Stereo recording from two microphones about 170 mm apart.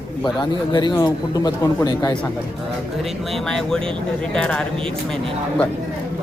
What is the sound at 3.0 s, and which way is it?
Speech, centre (ahead or behind).